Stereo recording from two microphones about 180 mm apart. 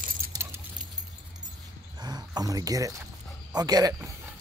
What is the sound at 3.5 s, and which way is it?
Speech, 20° right (ahead or behind).